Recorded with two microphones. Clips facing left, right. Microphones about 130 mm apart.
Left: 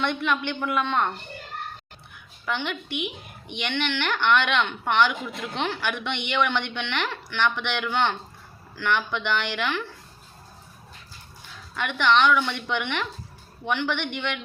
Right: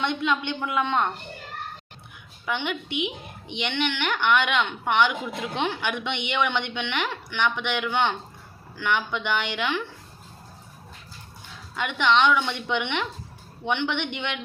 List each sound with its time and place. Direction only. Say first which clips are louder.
0.0 s speech: even; 15° right (ahead or behind)
2.5 s speech: right 1 dB; 15° right (ahead or behind)
11.8 s a woman's voice: even; 15° right (ahead or behind)